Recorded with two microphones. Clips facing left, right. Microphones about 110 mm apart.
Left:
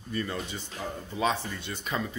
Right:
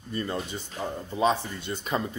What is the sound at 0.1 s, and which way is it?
Speech, 30° right (ahead or behind).